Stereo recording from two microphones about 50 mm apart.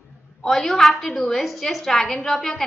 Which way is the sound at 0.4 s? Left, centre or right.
Centre.